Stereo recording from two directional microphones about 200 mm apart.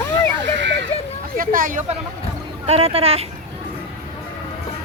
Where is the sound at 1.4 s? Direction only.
45° right (ahead or behind).